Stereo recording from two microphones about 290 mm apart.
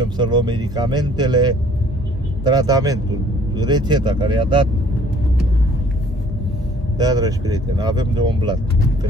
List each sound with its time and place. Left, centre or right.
0.0 s speech: centre
7.0 s speech: centre